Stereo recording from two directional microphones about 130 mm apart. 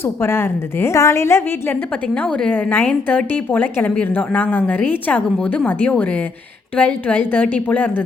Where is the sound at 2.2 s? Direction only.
10° left (ahead or behind).